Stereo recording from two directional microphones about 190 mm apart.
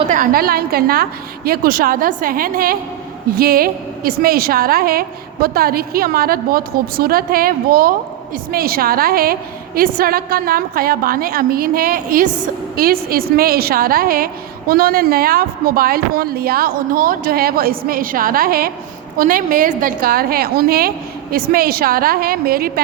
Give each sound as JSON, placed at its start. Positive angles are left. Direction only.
{"t": 0.1, "sound": "a woman's voice", "side_deg": -50}